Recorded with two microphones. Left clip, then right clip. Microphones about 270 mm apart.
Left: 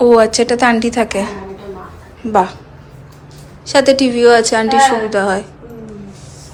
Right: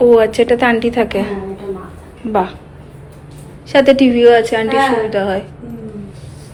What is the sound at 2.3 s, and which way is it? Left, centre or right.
Speech, centre.